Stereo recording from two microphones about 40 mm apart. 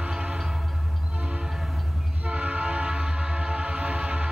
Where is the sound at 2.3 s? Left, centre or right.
Right.